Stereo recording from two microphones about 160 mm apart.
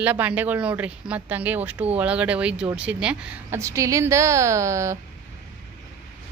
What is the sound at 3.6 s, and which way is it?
A woman's voice, 20° right (ahead or behind).